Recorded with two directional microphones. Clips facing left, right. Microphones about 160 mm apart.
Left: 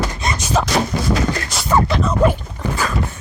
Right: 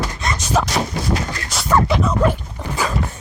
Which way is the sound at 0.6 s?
5° right (ahead or behind).